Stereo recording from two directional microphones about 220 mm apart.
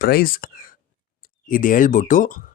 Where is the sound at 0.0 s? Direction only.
40° left (ahead or behind).